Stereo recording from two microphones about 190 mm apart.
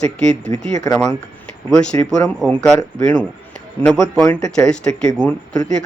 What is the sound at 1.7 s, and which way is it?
Speech, 5° left (ahead or behind).